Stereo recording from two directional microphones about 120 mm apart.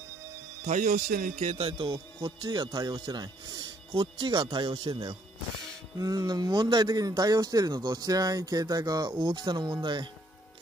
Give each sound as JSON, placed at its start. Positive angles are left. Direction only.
{"t": 0.7, "sound": "a man's voice", "side_deg": -90}
{"t": 1.6, "sound": "speech", "side_deg": -45}
{"t": 5.9, "sound": "speech", "side_deg": -30}